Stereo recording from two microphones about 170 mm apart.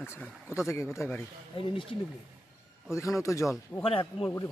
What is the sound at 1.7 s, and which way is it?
Speech, 30° left (ahead or behind).